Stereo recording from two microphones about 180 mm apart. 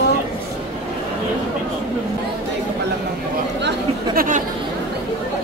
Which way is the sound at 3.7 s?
50° right (ahead or behind).